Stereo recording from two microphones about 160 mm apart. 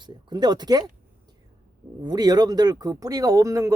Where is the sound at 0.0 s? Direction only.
30° right (ahead or behind).